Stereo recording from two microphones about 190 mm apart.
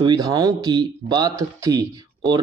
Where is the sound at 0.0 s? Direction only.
20° right (ahead or behind).